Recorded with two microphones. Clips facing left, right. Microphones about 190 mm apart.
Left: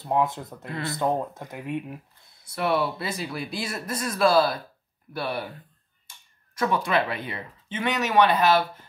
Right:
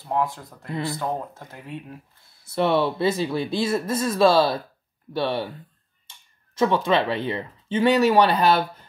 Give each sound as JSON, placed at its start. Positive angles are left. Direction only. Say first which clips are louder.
{"t": 0.0, "sound": "speech", "louder": "left 1 dB", "side_deg": 20}
{"t": 2.4, "sound": "speech", "louder": "right 4 dB", "side_deg": -25}
{"t": 6.5, "sound": "speech", "louder": "right 4 dB", "side_deg": -25}